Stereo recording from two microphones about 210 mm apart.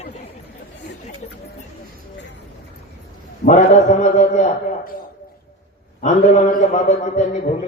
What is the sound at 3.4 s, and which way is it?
A man's voice, 35° left (ahead or behind).